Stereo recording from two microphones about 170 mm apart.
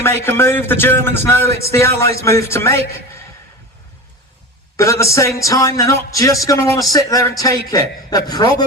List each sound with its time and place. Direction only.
0.0 s a man's voice: 15° left (ahead or behind)
4.8 s a man's voice: 20° left (ahead or behind)